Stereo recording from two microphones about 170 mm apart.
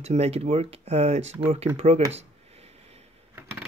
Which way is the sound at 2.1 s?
35° right (ahead or behind).